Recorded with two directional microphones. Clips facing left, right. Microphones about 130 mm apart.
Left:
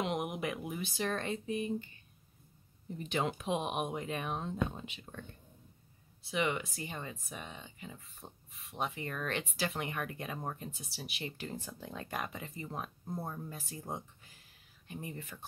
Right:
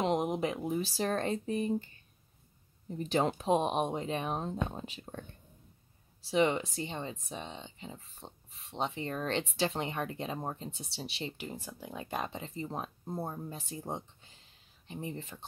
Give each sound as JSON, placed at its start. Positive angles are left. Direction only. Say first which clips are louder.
{"t": 0.0, "sound": "speech", "louder": "right 5 dB", "side_deg": -35}
{"t": 3.0, "sound": "speech", "louder": "right 5 dB", "side_deg": -35}
{"t": 6.2, "sound": "speech", "louder": "right 6 dB", "side_deg": -35}
{"t": 11.3, "sound": "speech", "louder": "even", "side_deg": -15}